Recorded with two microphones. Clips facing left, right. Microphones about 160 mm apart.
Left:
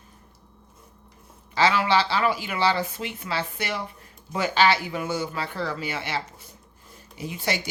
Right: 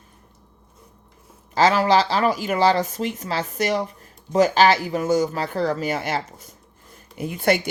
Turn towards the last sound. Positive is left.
turn(degrees=-55)  # may be behind; listen again after turning